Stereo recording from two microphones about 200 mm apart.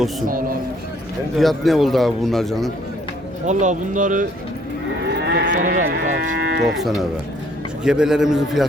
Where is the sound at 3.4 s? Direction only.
35° right (ahead or behind).